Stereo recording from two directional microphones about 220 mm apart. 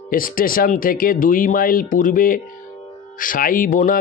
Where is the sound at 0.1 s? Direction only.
40° left (ahead or behind).